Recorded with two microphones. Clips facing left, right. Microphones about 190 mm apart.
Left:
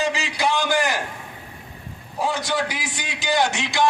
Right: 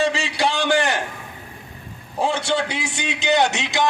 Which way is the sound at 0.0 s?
30° right (ahead or behind).